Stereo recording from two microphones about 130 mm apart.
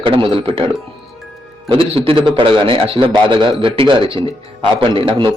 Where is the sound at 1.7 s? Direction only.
45° right (ahead or behind).